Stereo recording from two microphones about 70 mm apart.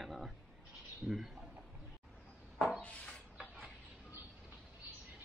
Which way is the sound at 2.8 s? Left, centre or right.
Centre.